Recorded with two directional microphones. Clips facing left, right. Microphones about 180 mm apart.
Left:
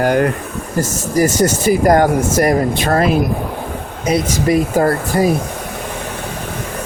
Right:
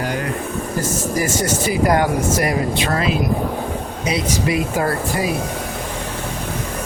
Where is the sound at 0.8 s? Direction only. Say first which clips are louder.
Left 7 dB; 40° left (ahead or behind).